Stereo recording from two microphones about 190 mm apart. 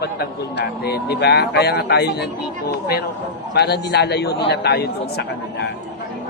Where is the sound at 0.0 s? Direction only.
55° left (ahead or behind).